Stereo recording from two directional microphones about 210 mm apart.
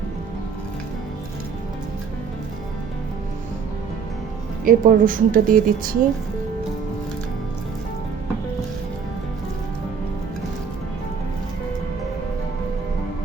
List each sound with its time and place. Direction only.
4.6 s a woman's voice: 40° right (ahead or behind)